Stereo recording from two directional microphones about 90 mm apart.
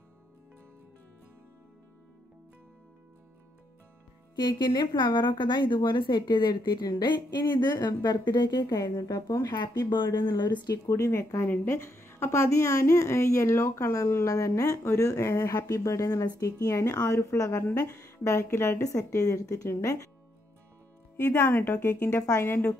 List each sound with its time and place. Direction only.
4.4 s a woman's voice: 55° left (ahead or behind)
9.8 s a woman's voice: 60° left (ahead or behind)
10.9 s a woman's voice: 35° left (ahead or behind)
21.4 s a woman's voice: 25° left (ahead or behind)